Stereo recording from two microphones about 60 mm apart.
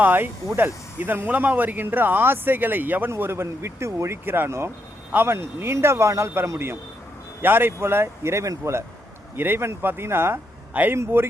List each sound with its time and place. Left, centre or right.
0.0 s speech: right
3.1 s speech: right
7.4 s speech: right
9.3 s speech: right